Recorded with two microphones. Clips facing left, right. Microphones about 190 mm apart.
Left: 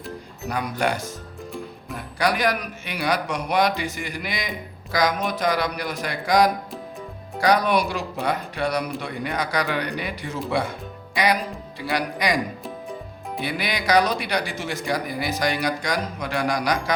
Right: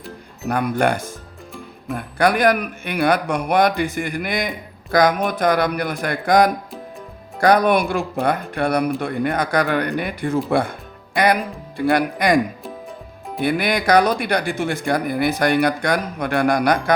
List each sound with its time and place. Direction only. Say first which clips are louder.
0.4 s speech: right 6 dB; 55° right (ahead or behind)
12.6 s music: even; centre (ahead or behind)
13.4 s speech: right 8 dB; 55° right (ahead or behind)